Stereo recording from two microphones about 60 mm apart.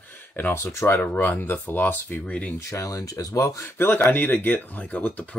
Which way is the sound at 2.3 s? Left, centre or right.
Centre.